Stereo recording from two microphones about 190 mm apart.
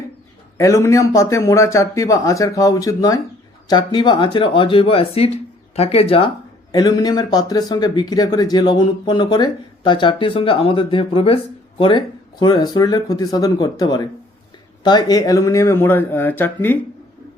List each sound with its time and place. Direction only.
0.5 s a man's voice: 15° left (ahead or behind)